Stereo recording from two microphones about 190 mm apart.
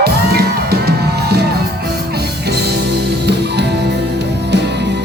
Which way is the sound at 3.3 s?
60° right (ahead or behind).